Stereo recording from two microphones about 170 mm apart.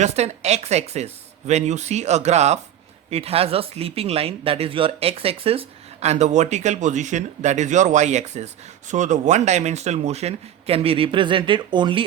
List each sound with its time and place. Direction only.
0.0 s speech: 40° right (ahead or behind)